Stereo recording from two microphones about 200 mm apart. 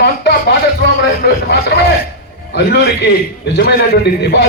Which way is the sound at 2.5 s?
55° left (ahead or behind).